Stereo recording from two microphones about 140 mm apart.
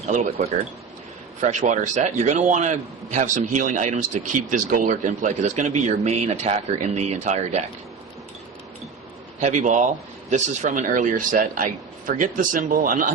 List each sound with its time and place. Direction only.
1.4 s a man's voice: 60° right (ahead or behind)
9.4 s speech: 60° right (ahead or behind); by 13.1 s 75° right (ahead or behind)